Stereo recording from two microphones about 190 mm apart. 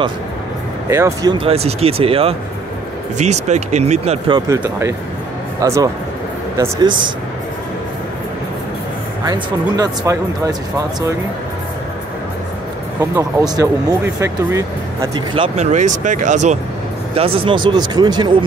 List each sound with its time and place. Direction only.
0.8 s speech: 15° right (ahead or behind); by 4.4 s 35° right (ahead or behind)
4.5 s speech: 15° right (ahead or behind)
9.2 s speech: 20° right (ahead or behind)
13.6 s speech: 15° right (ahead or behind)
15.3 s speech: 35° right (ahead or behind)